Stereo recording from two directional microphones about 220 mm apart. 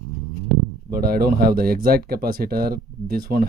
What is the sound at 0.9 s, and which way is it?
Speech, 40° right (ahead or behind).